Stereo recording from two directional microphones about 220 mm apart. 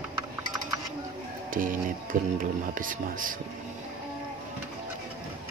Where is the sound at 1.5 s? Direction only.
40° right (ahead or behind).